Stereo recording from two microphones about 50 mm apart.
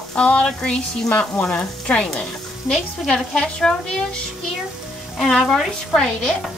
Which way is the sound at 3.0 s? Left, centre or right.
Centre.